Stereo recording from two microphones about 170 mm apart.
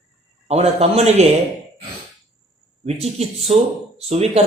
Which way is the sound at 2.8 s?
40° right (ahead or behind).